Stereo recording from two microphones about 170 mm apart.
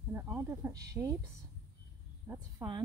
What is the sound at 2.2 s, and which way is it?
Speech, 15° right (ahead or behind).